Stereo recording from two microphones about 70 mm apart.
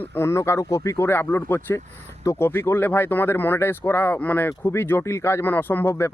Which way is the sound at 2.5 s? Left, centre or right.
Left.